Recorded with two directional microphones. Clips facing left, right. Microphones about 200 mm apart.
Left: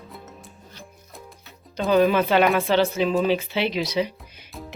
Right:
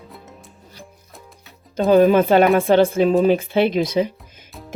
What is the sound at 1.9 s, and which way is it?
Speech, 45° right (ahead or behind).